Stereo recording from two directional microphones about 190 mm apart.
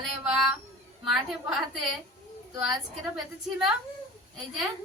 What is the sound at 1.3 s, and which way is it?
Speech, 5° right (ahead or behind).